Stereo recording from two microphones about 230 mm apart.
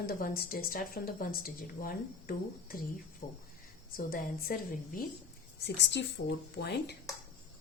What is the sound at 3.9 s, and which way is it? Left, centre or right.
A woman's voice, left.